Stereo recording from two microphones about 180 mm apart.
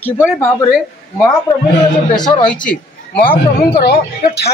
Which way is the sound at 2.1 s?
25° left (ahead or behind).